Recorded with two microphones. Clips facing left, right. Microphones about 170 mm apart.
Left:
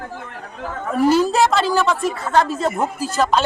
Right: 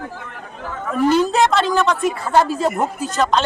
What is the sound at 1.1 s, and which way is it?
Speech, 5° left (ahead or behind).